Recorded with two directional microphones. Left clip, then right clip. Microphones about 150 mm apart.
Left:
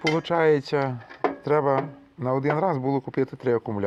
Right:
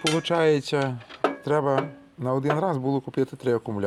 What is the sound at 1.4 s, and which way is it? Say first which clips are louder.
Speech: left 3 dB; centre (ahead or behind).